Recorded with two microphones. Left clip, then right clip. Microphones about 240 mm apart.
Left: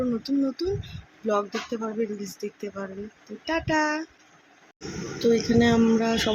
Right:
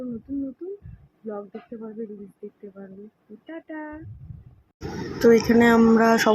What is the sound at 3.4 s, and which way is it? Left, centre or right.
Speech, left.